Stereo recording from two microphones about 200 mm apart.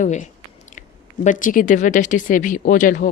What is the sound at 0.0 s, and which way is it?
A woman's voice, 35° left (ahead or behind).